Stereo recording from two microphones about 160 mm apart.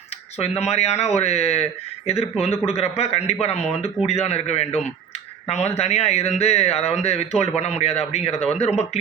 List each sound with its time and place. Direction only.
0.3 s speech: 40° left (ahead or behind)